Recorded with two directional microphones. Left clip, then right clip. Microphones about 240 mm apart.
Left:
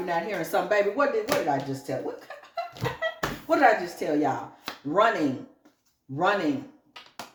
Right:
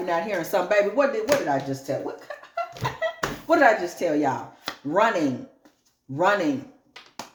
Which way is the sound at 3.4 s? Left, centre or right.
Right.